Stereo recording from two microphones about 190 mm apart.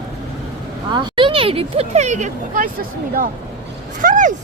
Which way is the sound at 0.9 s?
25° right (ahead or behind).